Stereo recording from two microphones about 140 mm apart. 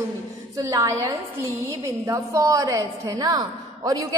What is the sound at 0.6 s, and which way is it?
A woman's voice, 25° right (ahead or behind).